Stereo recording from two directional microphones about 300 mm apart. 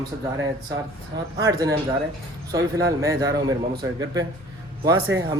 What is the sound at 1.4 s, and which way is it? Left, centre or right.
Speech, centre.